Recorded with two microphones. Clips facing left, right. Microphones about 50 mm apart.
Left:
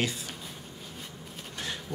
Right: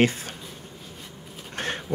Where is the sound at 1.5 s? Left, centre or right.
Right.